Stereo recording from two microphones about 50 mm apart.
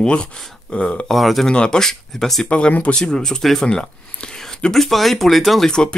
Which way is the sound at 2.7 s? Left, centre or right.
Left.